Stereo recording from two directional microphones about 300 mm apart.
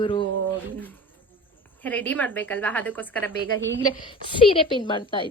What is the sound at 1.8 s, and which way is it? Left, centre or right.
A woman's voice, centre.